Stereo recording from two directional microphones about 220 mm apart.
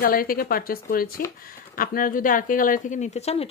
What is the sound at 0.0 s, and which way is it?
A woman's voice, 40° left (ahead or behind).